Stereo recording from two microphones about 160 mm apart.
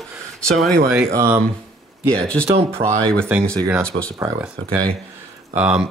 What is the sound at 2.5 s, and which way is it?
Speech, 35° right (ahead or behind).